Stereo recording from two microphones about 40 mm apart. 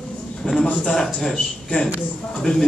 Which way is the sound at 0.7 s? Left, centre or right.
Centre.